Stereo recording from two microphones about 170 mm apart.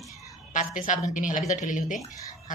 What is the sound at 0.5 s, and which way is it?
A woman's voice, 50° left (ahead or behind).